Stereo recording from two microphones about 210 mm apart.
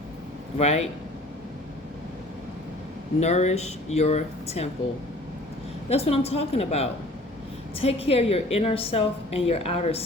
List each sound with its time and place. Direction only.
0.6 s speech: 30° left (ahead or behind)
3.2 s speech: 30° left (ahead or behind)
5.9 s a woman's voice: 30° left (ahead or behind)